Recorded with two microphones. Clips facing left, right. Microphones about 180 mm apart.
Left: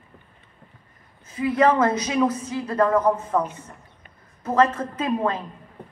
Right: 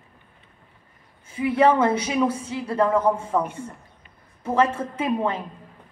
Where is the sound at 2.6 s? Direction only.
10° right (ahead or behind).